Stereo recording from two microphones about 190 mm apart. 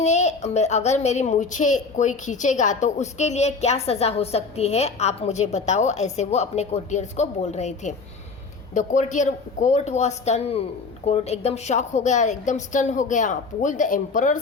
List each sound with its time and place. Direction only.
0.0 s a child's voice: 35° left (ahead or behind)